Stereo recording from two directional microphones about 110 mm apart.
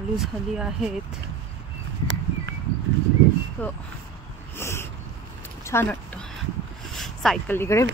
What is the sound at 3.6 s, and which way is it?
Speech, 15° left (ahead or behind).